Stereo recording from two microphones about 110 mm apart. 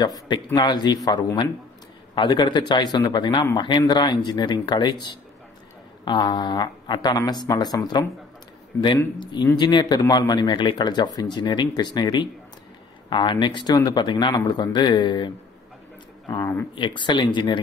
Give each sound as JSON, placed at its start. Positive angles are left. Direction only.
{"t": 0.0, "sound": "speech", "side_deg": 40}
{"t": 6.0, "sound": "speech", "side_deg": 45}
{"t": 16.7, "sound": "speech", "side_deg": 45}